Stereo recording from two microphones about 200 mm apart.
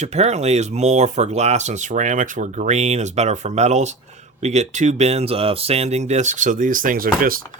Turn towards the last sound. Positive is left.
turn(degrees=-45)  # may be behind; listen again after turning